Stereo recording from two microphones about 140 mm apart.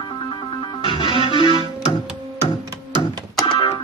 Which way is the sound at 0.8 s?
35° left (ahead or behind).